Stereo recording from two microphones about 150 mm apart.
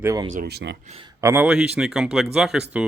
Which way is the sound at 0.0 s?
20° right (ahead or behind).